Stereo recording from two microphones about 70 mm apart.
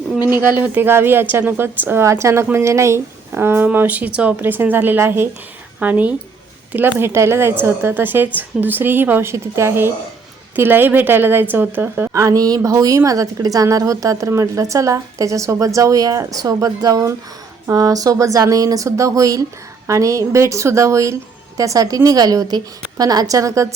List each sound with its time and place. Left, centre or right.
0.3 s a woman's voice: right
2.0 s a woman's voice: right
3.3 s speech: right
5.8 s a woman's voice: right
9.3 s a woman's voice: right
12.1 s a woman's voice: right